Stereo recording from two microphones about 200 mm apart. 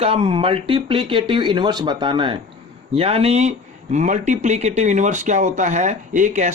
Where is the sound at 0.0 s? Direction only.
30° right (ahead or behind).